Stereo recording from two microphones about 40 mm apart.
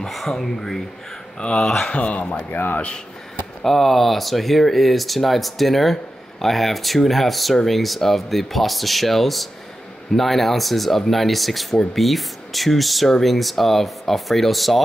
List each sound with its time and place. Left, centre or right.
0.4 s speech: centre
1.4 s speech: left
1.9 s speech: left
2.5 s speech: left
3.6 s speech: centre